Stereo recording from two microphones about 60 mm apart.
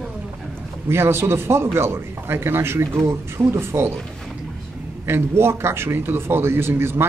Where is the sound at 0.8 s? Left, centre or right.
Right.